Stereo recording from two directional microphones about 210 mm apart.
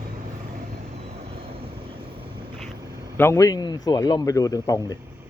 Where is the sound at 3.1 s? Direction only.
10° left (ahead or behind).